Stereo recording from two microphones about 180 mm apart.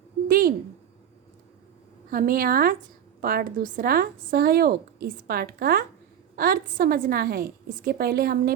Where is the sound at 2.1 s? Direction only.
55° right (ahead or behind).